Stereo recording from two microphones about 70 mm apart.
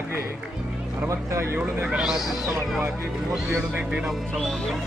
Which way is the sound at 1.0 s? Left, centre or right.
Right.